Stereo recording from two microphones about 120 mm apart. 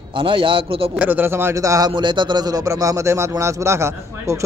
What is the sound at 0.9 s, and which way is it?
Speech, 15° right (ahead or behind).